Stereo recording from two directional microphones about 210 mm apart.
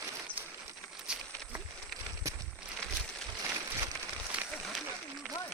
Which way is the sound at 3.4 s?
15° right (ahead or behind).